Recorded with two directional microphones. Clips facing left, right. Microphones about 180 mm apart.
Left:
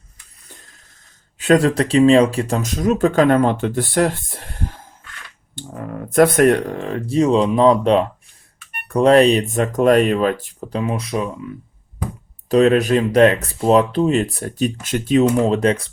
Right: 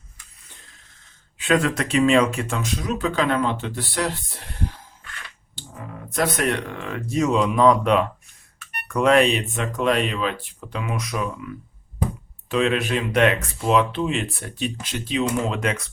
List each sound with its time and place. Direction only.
1.4 s speech: 35° left (ahead or behind)
12.5 s speech: 40° left (ahead or behind)